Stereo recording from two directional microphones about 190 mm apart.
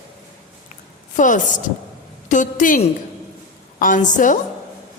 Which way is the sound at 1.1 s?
40° left (ahead or behind).